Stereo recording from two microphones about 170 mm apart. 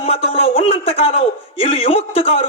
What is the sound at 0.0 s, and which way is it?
Speech, 35° left (ahead or behind).